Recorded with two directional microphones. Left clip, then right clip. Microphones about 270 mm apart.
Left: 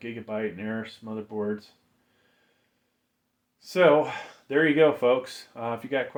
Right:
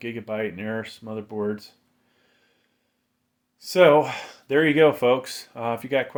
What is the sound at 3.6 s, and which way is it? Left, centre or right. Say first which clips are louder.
Speech: right 4 dB; right.